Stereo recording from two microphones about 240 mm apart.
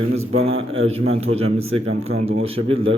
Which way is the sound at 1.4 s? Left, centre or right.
Right.